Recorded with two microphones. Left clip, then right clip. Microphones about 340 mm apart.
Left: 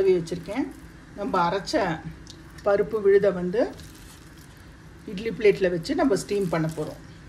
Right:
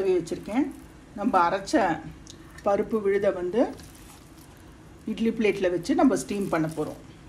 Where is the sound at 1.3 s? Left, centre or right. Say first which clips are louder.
Right 1 dB; centre.